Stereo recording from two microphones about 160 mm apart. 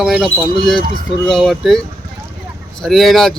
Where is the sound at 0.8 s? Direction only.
60° right (ahead or behind).